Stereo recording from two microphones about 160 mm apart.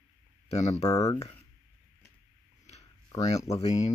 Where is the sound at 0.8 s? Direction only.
20° left (ahead or behind).